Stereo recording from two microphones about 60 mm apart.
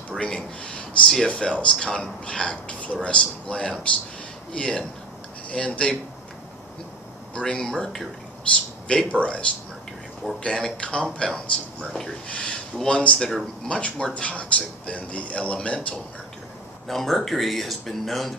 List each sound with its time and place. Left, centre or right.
0.1 s speech: centre
7.3 s speech: centre
8.8 s speech: centre
16.8 s speech: centre